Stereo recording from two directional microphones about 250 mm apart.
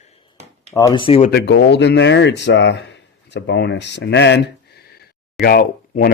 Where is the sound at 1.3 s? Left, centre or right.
Left.